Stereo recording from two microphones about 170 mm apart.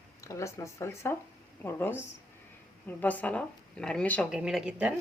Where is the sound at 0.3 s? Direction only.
15° left (ahead or behind).